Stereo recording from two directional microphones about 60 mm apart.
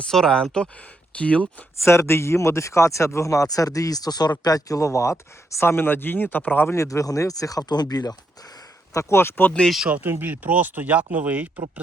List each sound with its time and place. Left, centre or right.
0.1 s speech: centre
1.8 s speech: left
6.7 s speech: left
8.9 s speech: left
9.1 s speech: left
9.9 s speech: right